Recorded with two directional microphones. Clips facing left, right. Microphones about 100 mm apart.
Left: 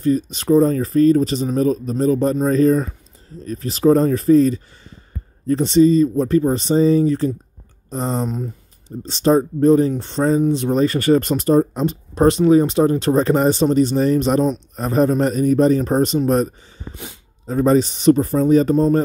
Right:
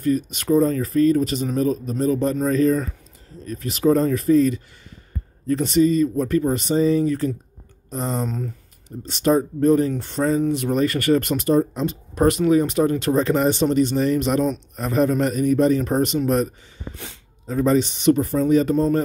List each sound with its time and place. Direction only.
0.0 s speech: 30° left (ahead or behind)
16.9 s speech: 15° left (ahead or behind)
17.5 s speech: 35° left (ahead or behind)